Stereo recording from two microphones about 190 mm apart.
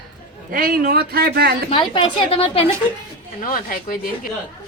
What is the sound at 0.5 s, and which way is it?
Speech, 50° right (ahead or behind).